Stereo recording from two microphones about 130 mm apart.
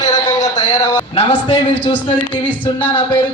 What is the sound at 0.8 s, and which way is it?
A man's voice, 35° left (ahead or behind).